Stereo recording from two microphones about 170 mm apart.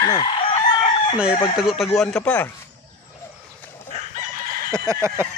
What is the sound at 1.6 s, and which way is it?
Speech, centre (ahead or behind).